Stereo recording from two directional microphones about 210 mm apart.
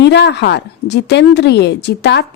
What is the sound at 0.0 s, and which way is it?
A woman's voice, 55° left (ahead or behind).